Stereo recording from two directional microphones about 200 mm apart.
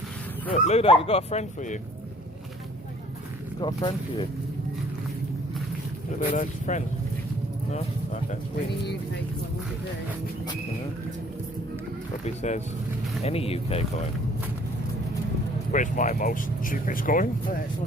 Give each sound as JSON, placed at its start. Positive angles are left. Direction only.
{"t": 0.5, "sound": "speech", "side_deg": 35}
{"t": 3.6, "sound": "speech", "side_deg": 25}
{"t": 6.3, "sound": "speech", "side_deg": 40}
{"t": 12.2, "sound": "speech", "side_deg": 35}
{"t": 15.7, "sound": "speech", "side_deg": 40}